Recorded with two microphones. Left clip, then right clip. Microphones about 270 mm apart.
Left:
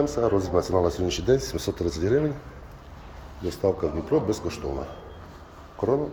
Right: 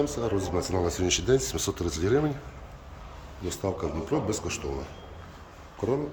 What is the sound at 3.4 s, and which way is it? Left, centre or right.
Speech, centre.